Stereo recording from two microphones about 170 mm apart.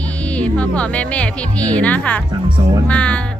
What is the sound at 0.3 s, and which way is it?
Speech, 10° left (ahead or behind).